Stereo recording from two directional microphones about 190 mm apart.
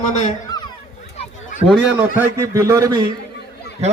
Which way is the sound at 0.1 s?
40° left (ahead or behind).